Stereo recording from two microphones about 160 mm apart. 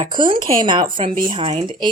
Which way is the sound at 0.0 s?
30° right (ahead or behind).